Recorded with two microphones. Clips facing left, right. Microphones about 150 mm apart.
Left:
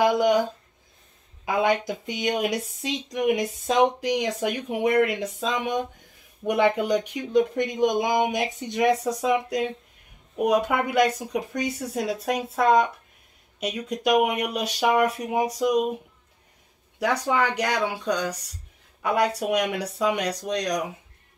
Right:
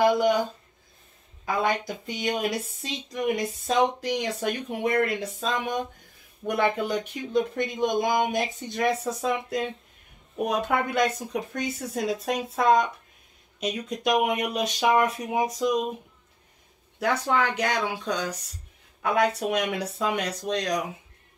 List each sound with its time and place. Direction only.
1.4 s speech: 20° left (ahead or behind)
17.0 s speech: 10° left (ahead or behind)